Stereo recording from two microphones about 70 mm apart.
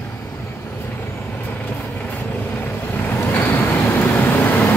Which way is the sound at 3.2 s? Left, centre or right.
Left.